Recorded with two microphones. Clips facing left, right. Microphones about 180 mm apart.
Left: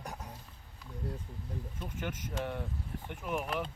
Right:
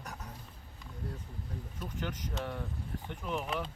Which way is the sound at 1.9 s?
10° left (ahead or behind).